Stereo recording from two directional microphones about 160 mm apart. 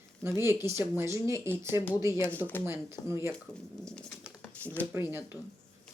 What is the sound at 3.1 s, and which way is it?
Speech, 15° right (ahead or behind).